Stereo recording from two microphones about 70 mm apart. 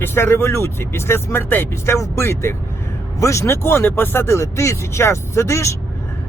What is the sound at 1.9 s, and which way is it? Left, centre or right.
Speech, left.